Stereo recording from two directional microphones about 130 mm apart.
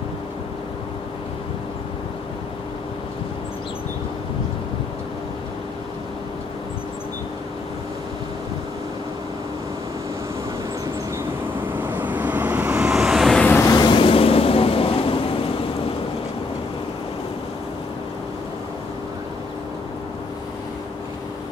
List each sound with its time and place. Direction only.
11.7 s vehicle: 15° right (ahead or behind); by 13.6 s 5° left (ahead or behind)
13.6 s vehicle: 30° left (ahead or behind); by 15.4 s 45° left (ahead or behind)